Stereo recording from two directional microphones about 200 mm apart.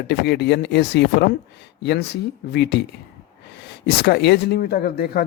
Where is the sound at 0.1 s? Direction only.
55° left (ahead or behind).